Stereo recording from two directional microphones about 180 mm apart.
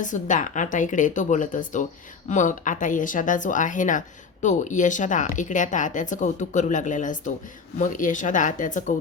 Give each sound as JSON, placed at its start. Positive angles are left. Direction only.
{"t": 0.0, "sound": "speech", "side_deg": 45}